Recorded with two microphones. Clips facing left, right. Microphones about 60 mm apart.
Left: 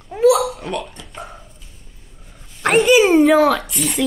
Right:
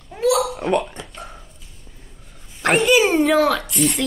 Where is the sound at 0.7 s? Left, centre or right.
Right.